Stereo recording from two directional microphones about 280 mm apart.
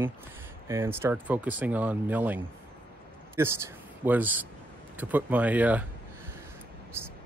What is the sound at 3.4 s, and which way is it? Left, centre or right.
Speech, centre.